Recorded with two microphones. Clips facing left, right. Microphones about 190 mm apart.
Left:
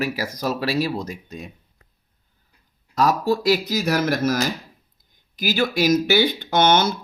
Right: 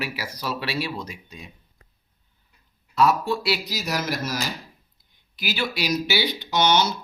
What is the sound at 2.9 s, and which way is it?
Speech, 40° left (ahead or behind).